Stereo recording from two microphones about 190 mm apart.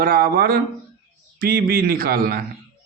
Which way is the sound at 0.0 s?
50° right (ahead or behind).